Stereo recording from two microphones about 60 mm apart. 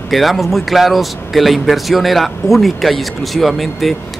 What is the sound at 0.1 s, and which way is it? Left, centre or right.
A man's voice, centre.